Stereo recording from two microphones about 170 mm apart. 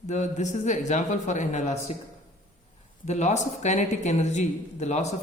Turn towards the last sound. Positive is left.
turn(degrees=40)  # may be behind; listen again after turning